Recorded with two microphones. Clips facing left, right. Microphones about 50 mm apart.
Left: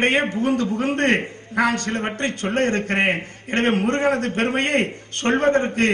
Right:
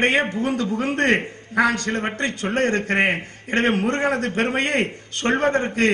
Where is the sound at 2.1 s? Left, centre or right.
Left.